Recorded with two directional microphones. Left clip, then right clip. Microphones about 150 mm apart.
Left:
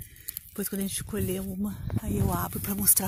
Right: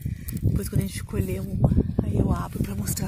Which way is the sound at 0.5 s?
10° right (ahead or behind).